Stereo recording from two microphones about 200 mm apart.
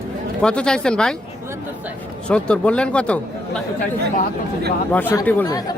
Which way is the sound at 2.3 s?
5° left (ahead or behind).